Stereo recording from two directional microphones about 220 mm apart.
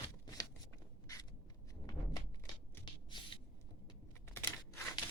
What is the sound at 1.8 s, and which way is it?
Thunk, 20° left (ahead or behind).